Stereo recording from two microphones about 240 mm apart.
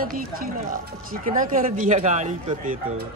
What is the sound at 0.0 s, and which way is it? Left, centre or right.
Speech, right.